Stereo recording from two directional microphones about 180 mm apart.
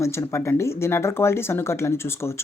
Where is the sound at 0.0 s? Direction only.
15° left (ahead or behind).